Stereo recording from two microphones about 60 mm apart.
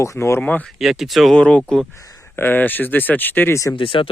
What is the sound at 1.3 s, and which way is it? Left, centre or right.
Speech, centre.